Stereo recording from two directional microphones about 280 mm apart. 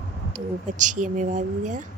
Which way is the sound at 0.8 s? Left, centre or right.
Right.